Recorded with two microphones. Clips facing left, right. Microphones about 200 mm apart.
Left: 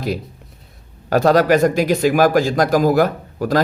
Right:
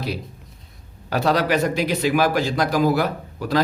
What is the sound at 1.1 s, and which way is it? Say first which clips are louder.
A man's voice: left 6 dB; 45° left (ahead or behind).